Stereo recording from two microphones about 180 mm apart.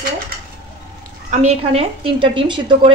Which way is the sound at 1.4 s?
35° right (ahead or behind).